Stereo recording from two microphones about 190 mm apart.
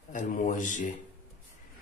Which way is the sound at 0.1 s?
40° left (ahead or behind).